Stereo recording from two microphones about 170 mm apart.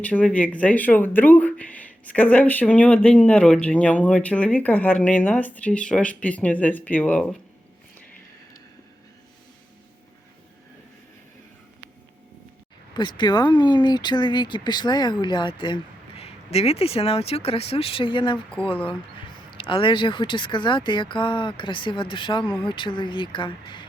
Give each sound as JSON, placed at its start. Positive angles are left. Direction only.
{"t": 0.0, "sound": "speech", "side_deg": 10}
{"t": 12.9, "sound": "speech", "side_deg": 25}
{"t": 19.5, "sound": "speech", "side_deg": 30}